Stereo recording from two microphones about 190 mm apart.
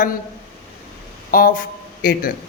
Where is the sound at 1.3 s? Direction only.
50° left (ahead or behind).